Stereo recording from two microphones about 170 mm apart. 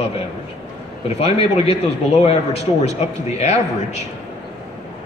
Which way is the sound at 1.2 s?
35° left (ahead or behind).